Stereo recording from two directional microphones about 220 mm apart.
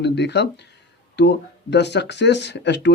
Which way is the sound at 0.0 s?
50° left (ahead or behind).